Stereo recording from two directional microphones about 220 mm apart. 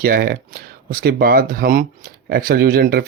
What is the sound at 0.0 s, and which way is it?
Speech, 45° right (ahead or behind).